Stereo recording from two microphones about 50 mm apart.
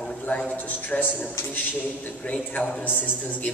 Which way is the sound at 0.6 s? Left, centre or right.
Left.